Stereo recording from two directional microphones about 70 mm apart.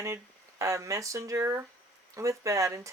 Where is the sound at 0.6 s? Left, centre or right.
Right.